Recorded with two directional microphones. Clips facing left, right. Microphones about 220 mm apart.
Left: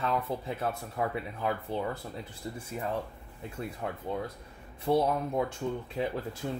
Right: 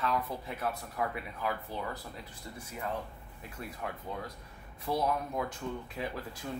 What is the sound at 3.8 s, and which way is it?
Speech, 25° left (ahead or behind).